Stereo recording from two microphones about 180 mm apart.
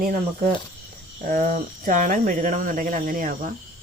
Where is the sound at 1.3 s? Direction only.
50° right (ahead or behind).